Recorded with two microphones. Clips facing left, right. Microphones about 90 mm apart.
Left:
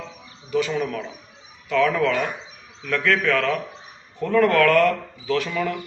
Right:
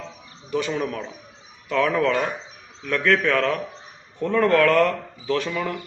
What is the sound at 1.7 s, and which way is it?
Speech, 30° right (ahead or behind).